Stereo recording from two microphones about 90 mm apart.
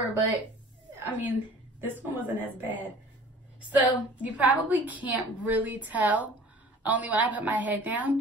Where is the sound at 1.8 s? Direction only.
20° right (ahead or behind).